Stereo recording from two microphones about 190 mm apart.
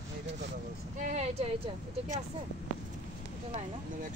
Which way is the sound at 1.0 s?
40° right (ahead or behind).